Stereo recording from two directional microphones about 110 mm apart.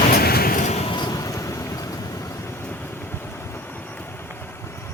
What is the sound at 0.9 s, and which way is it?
Vehicle, 40° left (ahead or behind).